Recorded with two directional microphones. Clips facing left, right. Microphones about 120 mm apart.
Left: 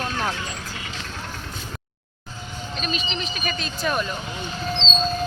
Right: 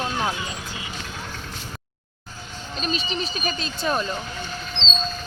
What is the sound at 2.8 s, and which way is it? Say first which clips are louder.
Speech: right 2 dB; 35° right (ahead or behind).